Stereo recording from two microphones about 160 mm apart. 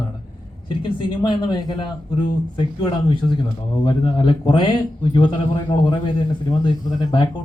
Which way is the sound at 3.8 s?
30° left (ahead or behind).